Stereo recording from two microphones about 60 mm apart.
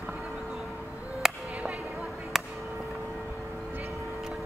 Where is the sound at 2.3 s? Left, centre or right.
Centre.